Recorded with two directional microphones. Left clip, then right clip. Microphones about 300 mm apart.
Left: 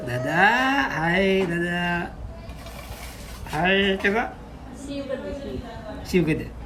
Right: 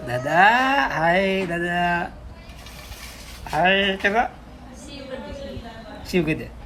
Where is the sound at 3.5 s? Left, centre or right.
Centre.